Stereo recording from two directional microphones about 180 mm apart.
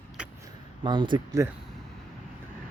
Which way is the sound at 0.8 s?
25° right (ahead or behind).